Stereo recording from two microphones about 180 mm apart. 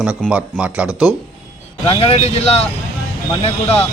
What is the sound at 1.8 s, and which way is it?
Speech, 35° left (ahead or behind).